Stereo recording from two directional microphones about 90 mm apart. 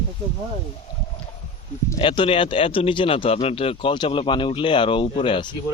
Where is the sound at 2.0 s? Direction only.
75° left (ahead or behind).